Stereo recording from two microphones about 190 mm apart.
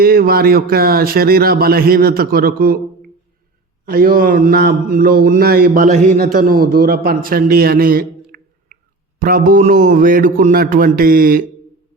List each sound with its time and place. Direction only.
0.0 s a man's voice: 50° right (ahead or behind)
3.8 s a man's voice: 50° right (ahead or behind)